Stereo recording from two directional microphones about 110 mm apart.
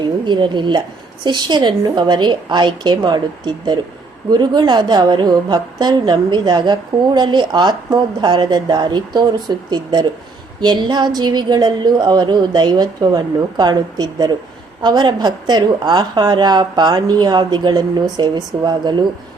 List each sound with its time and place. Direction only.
0.0 s a woman's voice: 45° right (ahead or behind)